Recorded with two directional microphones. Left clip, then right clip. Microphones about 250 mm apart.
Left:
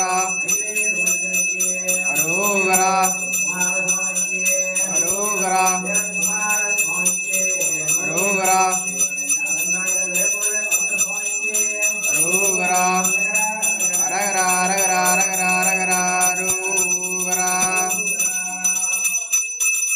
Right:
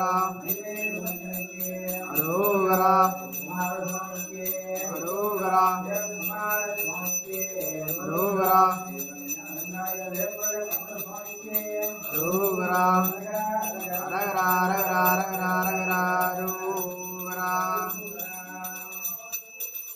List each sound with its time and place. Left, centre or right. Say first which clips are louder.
2.6 s jingle bell: left 1 dB; centre
5.5 s jingle bell: left 3 dB; centre
8.4 s jingle bell: left 1 dB; centre
12.6 s music: left 1 dB; centre
14.3 s bell: left 3 dB; centre
17.4 s jingle bell: left 4 dB; centre